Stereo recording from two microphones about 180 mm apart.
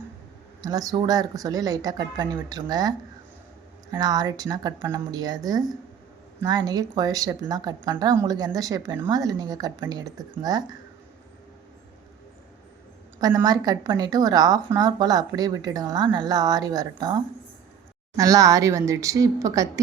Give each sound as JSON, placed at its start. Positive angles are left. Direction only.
{"t": 0.6, "sound": "a woman's voice", "side_deg": -20}
{"t": 3.9, "sound": "a woman's voice", "side_deg": -20}
{"t": 13.1, "sound": "a woman's voice", "side_deg": -20}